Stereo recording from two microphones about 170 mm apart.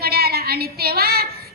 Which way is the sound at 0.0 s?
65° right (ahead or behind).